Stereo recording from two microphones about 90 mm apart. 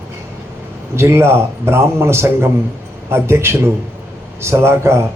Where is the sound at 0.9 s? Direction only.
30° right (ahead or behind).